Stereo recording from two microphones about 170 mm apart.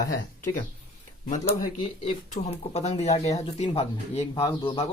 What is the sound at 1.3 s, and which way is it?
Speech, 45° left (ahead or behind).